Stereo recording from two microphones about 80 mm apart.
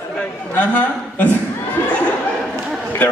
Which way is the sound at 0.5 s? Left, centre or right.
Left.